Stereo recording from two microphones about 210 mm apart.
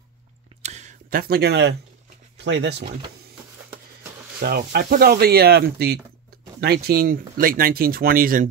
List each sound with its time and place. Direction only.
0.6 s a sound: 30° right (ahead or behind); by 1.8 s 55° right (ahead or behind)
2.3 s speech: 55° right (ahead or behind)
4.4 s speech: 45° right (ahead or behind)